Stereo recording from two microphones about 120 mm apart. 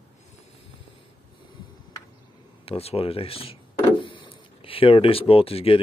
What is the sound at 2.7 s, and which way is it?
Speech, 55° left (ahead or behind).